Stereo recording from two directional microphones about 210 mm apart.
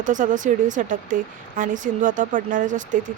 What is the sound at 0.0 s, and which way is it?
Speech, 40° right (ahead or behind).